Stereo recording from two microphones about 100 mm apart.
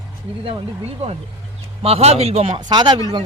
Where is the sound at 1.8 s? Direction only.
85° right.